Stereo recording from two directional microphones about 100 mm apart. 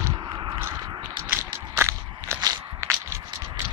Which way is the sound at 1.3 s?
25° right (ahead or behind).